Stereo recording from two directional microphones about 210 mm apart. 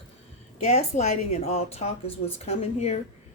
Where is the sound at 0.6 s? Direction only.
35° left (ahead or behind).